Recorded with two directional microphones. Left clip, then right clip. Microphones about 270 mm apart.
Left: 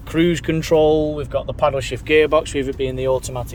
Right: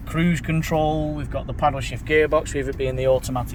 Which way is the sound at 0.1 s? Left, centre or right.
Centre.